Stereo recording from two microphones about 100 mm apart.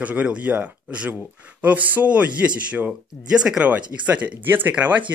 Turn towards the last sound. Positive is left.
turn(degrees=-15)  # may be behind; listen again after turning